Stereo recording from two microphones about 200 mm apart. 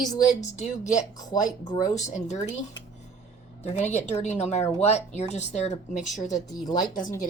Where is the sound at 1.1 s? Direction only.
20° left (ahead or behind).